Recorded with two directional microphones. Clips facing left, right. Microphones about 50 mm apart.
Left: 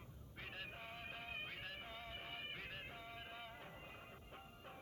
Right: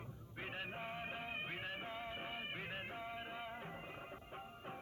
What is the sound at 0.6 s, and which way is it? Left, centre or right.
Music, right.